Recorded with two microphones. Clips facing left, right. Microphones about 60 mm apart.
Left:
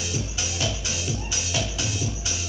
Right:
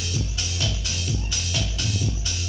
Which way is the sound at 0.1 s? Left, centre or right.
Centre.